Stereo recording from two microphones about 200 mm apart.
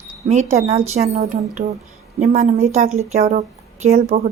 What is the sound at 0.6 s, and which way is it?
A woman's voice, 30° right (ahead or behind).